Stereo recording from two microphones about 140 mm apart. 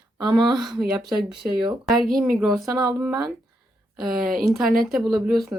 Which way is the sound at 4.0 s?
5° right (ahead or behind).